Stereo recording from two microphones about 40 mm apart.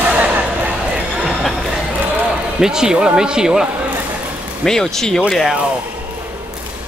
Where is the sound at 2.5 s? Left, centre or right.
Centre.